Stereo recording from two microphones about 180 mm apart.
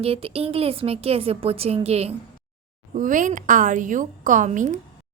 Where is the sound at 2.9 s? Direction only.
45° right (ahead or behind).